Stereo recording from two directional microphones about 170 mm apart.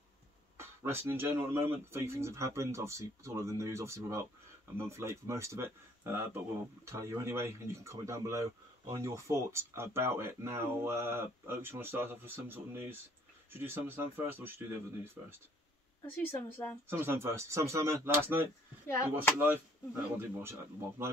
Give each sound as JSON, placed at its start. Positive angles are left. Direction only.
{"t": 0.6, "sound": "speech", "side_deg": -15}
{"t": 16.1, "sound": "a woman's voice", "side_deg": 15}
{"t": 16.9, "sound": "speech", "side_deg": -15}
{"t": 18.9, "sound": "a woman's voice", "side_deg": 15}
{"t": 19.3, "sound": "speech", "side_deg": -15}